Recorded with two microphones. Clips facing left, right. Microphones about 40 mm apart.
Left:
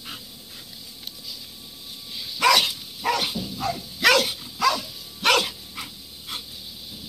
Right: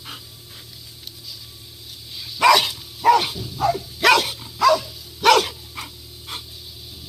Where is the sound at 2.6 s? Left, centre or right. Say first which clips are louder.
Right 9 dB; right.